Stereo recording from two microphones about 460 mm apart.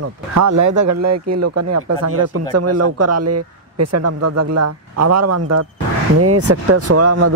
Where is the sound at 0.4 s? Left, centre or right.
Right.